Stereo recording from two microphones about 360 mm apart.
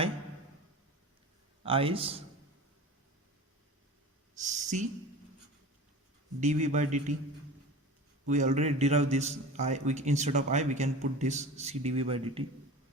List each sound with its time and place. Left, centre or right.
1.6 s a man's voice: centre
4.4 s speech: centre
6.4 s a man's voice: centre
8.3 s a man's voice: centre